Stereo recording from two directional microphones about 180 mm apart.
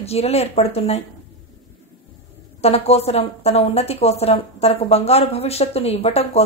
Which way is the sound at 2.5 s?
35° left (ahead or behind).